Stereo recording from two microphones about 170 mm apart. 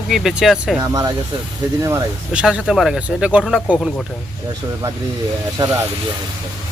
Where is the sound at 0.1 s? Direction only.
Centre (ahead or behind).